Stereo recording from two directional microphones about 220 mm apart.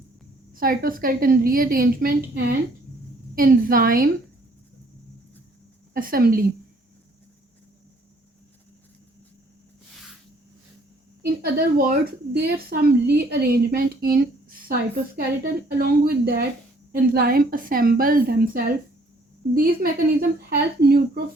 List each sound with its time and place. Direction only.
0.5 s a woman's voice: 40° right (ahead or behind)
5.9 s a woman's voice: 40° right (ahead or behind)
11.2 s a woman's voice: 45° right (ahead or behind)